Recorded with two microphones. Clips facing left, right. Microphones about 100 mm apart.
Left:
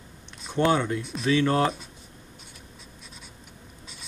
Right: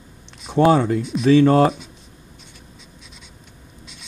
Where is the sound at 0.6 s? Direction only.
30° right (ahead or behind).